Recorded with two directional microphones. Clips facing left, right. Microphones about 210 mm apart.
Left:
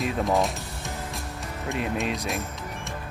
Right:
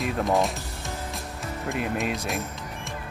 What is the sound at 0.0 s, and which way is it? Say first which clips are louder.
Speech: even; centre (ahead or behind).